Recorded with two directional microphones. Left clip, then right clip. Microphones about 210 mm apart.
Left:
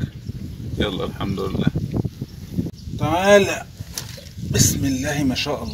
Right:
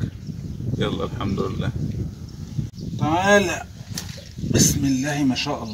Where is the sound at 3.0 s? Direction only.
35° left (ahead or behind).